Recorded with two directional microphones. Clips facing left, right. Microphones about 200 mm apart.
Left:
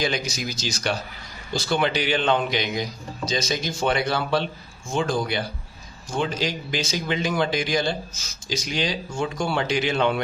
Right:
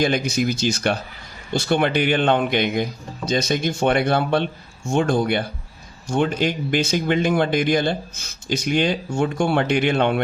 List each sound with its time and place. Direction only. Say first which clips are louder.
0.0 s a man's voice: right 6 dB; 55° right (ahead or behind)